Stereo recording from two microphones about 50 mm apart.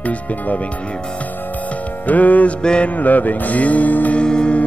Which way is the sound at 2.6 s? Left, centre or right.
Centre.